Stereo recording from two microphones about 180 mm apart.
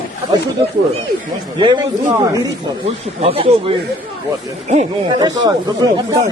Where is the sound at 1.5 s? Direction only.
25° right (ahead or behind).